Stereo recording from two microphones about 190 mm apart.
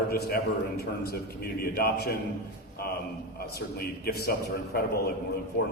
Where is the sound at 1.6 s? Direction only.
55° left (ahead or behind).